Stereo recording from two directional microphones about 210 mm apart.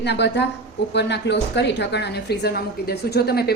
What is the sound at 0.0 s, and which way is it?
Speech, 55° left (ahead or behind).